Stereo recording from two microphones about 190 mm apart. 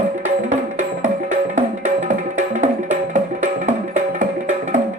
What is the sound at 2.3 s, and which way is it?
Music, 40° right (ahead or behind).